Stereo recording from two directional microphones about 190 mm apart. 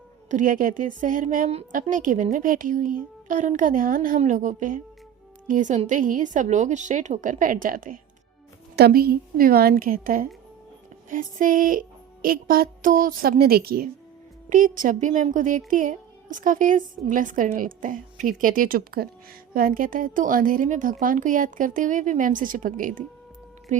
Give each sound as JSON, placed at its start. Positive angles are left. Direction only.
{"t": 0.3, "sound": "a woman's voice", "side_deg": -45}